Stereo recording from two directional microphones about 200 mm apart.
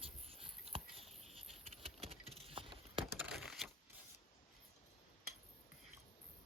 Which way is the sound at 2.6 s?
25° right (ahead or behind).